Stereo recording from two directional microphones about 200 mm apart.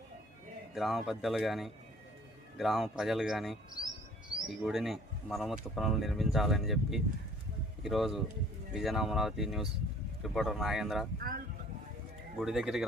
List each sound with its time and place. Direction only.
0.7 s speech: centre (ahead or behind)
11.2 s speech: 45° right (ahead or behind)
12.4 s speech: centre (ahead or behind)